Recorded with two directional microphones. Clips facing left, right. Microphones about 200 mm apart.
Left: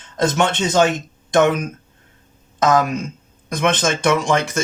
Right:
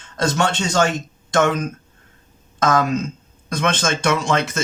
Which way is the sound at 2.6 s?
15° left (ahead or behind).